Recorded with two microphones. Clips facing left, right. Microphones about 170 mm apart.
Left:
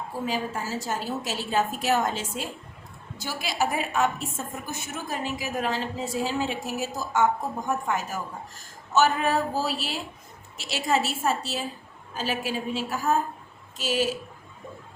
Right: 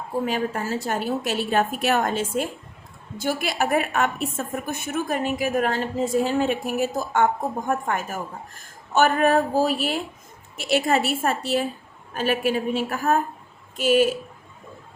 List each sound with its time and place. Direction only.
0.3 s a woman's voice: 60° right (ahead or behind)